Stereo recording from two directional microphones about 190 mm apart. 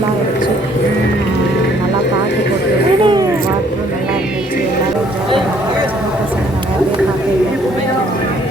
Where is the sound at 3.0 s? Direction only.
25° right (ahead or behind).